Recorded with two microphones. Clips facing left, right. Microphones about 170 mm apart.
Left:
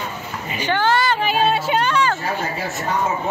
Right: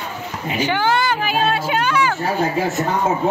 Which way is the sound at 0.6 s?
10° right (ahead or behind).